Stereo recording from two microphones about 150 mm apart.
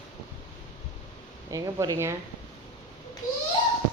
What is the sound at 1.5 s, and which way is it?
Speech, 20° right (ahead or behind).